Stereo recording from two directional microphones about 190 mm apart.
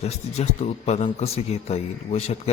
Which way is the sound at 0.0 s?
35° left (ahead or behind).